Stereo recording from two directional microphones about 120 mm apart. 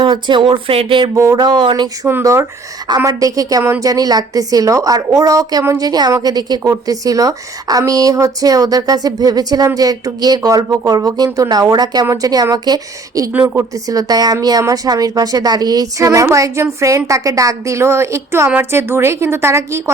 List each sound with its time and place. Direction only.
0.0 s speech: 40° right (ahead or behind)
1.1 s a woman's voice: 25° right (ahead or behind)
1.4 s a woman's voice: 40° right (ahead or behind)
2.0 s a woman's voice: 20° right (ahead or behind)
3.6 s a woman's voice: 20° right (ahead or behind)
3.8 s a woman's voice: 30° right (ahead or behind)
13.3 s a woman's voice: 15° right (ahead or behind)
13.6 s a woman's voice: 30° right (ahead or behind)